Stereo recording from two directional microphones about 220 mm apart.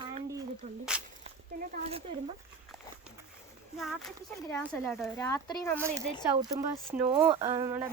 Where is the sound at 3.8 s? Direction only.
Centre (ahead or behind).